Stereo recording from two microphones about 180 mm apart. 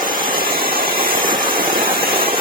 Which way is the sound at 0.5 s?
55° right (ahead or behind).